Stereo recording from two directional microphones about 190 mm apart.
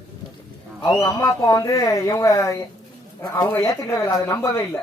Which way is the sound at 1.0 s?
20° left (ahead or behind).